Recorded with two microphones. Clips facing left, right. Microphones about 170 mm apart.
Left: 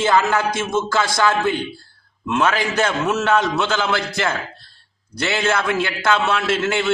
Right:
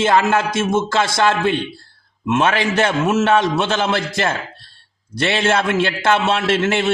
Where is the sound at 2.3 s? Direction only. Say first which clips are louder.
Right 2 dB; 20° right (ahead or behind).